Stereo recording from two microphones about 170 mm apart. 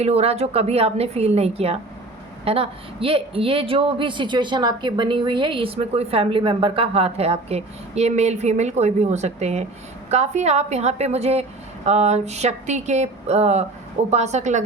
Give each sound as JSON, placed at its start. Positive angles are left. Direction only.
{"t": 0.0, "sound": "a woman's voice", "side_deg": -40}